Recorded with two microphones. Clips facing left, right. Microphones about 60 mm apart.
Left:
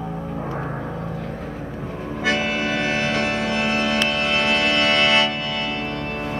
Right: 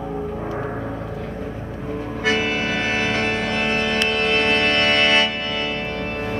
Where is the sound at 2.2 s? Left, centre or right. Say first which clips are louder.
Right 1 dB; centre.